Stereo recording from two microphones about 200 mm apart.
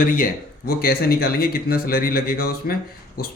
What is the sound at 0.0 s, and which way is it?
Speech, 45° left (ahead or behind).